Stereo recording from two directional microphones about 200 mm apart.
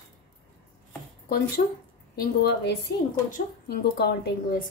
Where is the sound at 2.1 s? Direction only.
45° left (ahead or behind).